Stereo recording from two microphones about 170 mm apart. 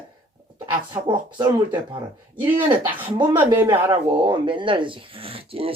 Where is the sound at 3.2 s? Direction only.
25° right (ahead or behind).